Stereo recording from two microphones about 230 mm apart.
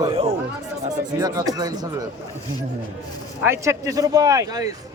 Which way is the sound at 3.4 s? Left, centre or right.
Centre.